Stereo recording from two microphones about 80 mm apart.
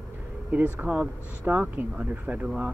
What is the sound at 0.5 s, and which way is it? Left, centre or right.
Speech, centre.